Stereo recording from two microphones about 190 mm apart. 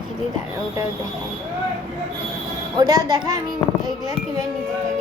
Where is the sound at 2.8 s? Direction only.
20° right (ahead or behind).